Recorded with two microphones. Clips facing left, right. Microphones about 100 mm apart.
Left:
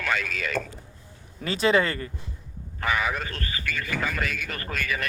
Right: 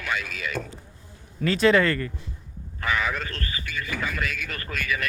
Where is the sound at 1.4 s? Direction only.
10° left (ahead or behind).